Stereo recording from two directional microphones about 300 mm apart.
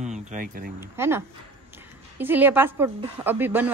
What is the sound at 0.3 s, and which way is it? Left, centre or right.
Speech, right.